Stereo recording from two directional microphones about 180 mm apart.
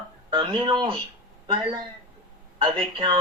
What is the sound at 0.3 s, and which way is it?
Speech, 25° right (ahead or behind).